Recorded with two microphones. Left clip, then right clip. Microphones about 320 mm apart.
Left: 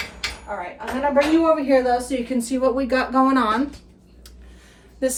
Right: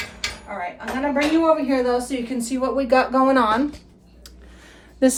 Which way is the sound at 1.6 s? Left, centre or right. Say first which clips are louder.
Left 3 dB; centre.